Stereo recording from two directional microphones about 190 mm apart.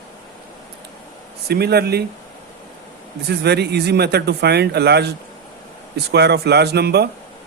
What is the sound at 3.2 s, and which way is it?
Speech, 60° right (ahead or behind).